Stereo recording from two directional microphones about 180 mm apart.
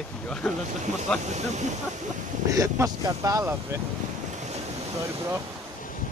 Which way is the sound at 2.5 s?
20° right (ahead or behind).